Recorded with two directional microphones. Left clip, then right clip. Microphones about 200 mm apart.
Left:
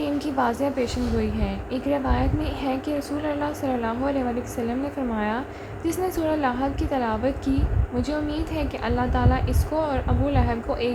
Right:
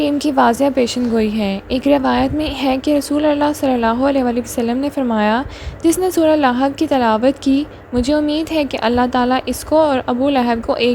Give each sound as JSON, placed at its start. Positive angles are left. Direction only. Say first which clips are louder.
{"t": 0.0, "sound": "a woman's voice", "louder": "right 10 dB", "side_deg": -40}